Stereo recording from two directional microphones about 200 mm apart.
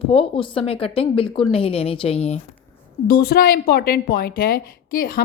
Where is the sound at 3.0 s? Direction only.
50° left (ahead or behind).